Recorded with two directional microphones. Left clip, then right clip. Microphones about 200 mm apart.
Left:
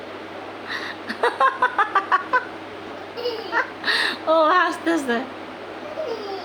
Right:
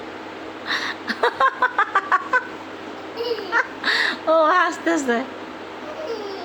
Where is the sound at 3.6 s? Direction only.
10° right (ahead or behind).